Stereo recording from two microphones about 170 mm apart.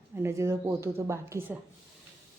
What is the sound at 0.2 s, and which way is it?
Speech, 15° right (ahead or behind).